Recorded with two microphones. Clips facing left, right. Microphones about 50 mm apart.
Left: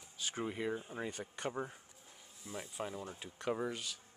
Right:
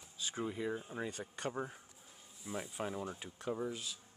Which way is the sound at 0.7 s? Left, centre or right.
Centre.